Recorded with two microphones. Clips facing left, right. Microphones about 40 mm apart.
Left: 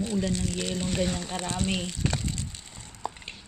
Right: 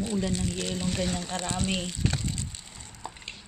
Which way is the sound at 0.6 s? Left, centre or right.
Centre.